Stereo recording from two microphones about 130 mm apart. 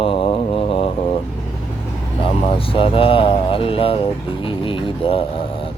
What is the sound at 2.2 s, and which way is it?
Speech, 45° left (ahead or behind).